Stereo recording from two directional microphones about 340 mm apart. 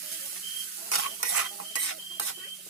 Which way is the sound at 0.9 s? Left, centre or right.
Left.